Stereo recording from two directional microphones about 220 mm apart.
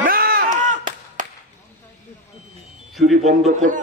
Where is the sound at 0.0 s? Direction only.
40° right (ahead or behind).